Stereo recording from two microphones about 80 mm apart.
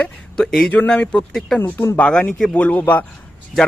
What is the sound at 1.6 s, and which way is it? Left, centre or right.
Speech, left.